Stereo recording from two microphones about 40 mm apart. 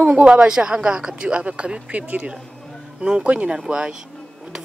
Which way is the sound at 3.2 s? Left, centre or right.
Right.